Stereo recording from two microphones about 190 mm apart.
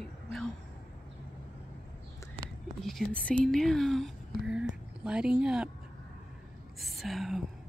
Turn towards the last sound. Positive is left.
turn(degrees=0)  # may be behind; listen again after turning